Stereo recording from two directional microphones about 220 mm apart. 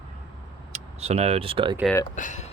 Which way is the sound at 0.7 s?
30° right (ahead or behind).